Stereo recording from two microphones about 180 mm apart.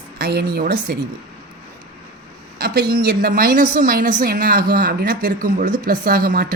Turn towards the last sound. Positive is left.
turn(degrees=-55)  # may be behind; listen again after turning